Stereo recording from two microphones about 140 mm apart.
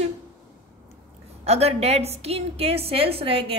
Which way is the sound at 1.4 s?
45° right (ahead or behind).